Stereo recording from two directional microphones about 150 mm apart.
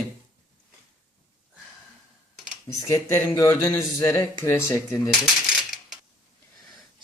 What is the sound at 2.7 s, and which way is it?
Speech, 20° left (ahead or behind).